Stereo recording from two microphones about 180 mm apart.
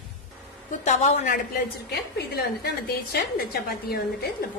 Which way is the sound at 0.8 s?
40° left (ahead or behind).